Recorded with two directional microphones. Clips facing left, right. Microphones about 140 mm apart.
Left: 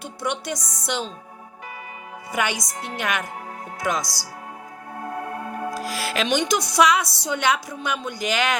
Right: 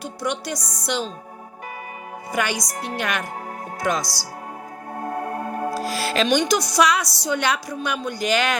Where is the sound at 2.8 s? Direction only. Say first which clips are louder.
Even; 15° left (ahead or behind).